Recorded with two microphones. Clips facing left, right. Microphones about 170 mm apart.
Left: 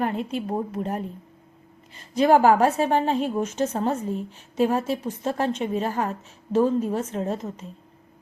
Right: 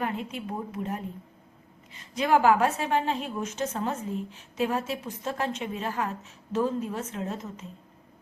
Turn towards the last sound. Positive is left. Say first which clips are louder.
# left 6 dB
turn(degrees=35)  # may be behind; listen again after turning